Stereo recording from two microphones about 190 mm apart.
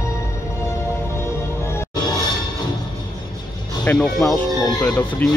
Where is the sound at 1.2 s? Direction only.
15° left (ahead or behind).